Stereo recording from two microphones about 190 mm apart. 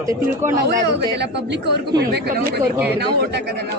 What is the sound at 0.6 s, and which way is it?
Speech, 60° right (ahead or behind).